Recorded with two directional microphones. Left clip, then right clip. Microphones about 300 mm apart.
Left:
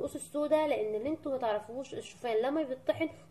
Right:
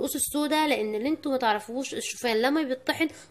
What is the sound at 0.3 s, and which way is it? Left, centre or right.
A woman's voice, right.